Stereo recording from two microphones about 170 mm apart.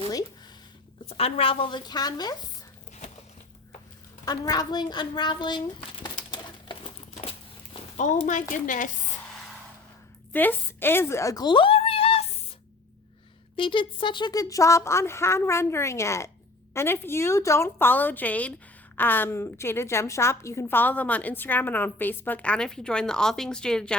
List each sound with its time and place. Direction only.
1.0 s speech: 35° left (ahead or behind)
4.3 s a sound: 25° left (ahead or behind); by 8.9 s 50° left (ahead or behind)
10.3 s a woman's voice: 10° left (ahead or behind); by 12.2 s 35° left (ahead or behind)
13.6 s a woman's voice: 30° left (ahead or behind); by 23.9 s 5° left (ahead or behind)